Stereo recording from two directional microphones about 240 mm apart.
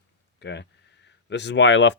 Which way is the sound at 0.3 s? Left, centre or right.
Left.